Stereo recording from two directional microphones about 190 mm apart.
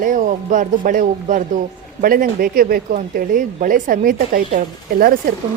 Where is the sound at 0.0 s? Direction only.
45° right (ahead or behind).